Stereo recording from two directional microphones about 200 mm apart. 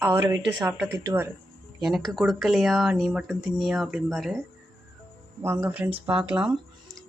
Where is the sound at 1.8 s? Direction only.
Centre (ahead or behind).